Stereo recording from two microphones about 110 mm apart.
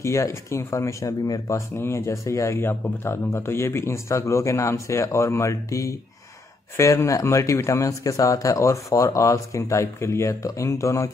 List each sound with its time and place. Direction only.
0.0 s speech: 25° left (ahead or behind)